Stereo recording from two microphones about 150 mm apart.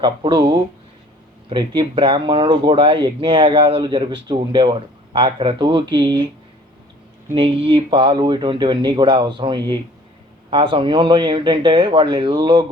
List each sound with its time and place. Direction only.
0.0 s speech: 30° right (ahead or behind)
7.3 s speech: 35° right (ahead or behind)